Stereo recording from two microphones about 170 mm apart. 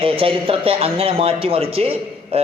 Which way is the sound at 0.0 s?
30° right (ahead or behind).